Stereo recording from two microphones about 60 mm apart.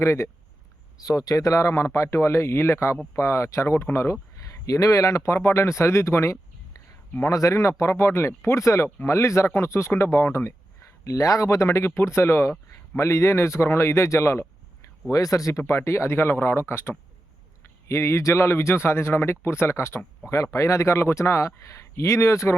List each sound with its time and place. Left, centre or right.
0.0 s speech: left
0.9 s speech: left
4.6 s speech: left
7.3 s speech: left
11.0 s speech: left
15.1 s speech: left
15.6 s speech: left
20.3 s speech: left